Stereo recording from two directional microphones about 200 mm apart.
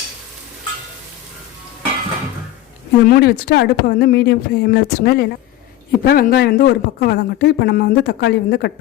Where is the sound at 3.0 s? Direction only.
50° left (ahead or behind).